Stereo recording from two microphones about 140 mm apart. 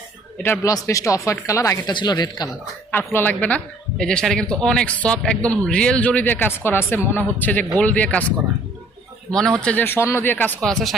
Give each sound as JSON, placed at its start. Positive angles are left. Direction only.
{"t": 0.4, "sound": "a man's voice", "side_deg": 15}
{"t": 1.9, "sound": "speech", "side_deg": 35}
{"t": 3.1, "sound": "a man's voice", "side_deg": 15}
{"t": 9.6, "sound": "a man's voice", "side_deg": 10}
{"t": 10.6, "sound": "speech", "side_deg": 0}